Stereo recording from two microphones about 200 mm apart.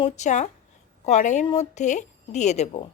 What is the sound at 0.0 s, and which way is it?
Speech, 35° left (ahead or behind).